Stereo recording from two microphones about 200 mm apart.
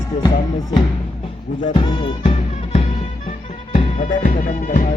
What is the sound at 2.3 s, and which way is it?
Music, 35° left (ahead or behind).